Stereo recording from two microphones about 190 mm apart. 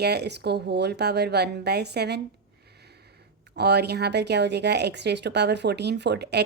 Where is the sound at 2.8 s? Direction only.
60° right (ahead or behind).